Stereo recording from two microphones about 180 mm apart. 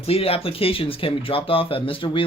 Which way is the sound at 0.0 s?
35° left (ahead or behind).